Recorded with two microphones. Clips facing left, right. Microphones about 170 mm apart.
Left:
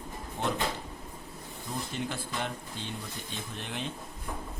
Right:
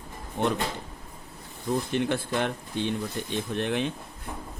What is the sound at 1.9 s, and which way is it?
A man's voice, 65° right (ahead or behind).